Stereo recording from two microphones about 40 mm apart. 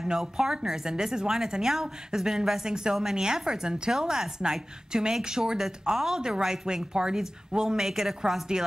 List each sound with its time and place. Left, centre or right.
0.0 s a woman's voice: centre